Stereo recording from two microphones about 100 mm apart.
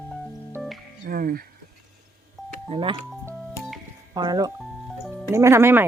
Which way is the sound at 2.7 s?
60° right (ahead or behind).